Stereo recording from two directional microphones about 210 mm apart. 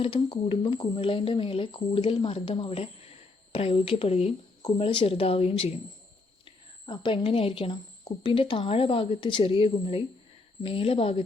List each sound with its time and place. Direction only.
0.0 s speech: 25° left (ahead or behind)